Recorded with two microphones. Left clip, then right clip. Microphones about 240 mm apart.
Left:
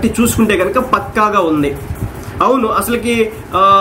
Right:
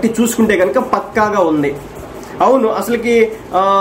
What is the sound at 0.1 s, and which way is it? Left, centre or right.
Speech, left.